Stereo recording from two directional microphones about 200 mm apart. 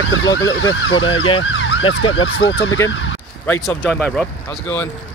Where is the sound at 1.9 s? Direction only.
80° left.